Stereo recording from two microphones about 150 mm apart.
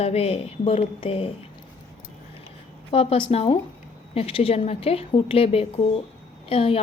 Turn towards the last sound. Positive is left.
turn(degrees=40)  # may be behind; listen again after turning